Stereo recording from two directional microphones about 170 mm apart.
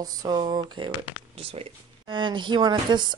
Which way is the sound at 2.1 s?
25° right (ahead or behind).